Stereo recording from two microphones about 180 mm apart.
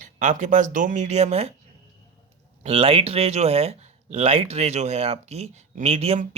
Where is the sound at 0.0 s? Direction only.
45° right (ahead or behind).